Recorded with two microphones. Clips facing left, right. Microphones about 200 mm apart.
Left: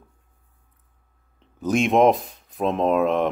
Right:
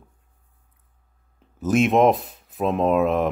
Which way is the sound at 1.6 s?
5° right (ahead or behind).